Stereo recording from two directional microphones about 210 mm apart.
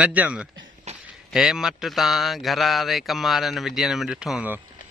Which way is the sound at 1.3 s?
Centre (ahead or behind).